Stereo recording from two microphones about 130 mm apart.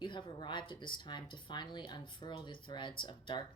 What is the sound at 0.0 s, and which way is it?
A woman's voice, 40° left (ahead or behind).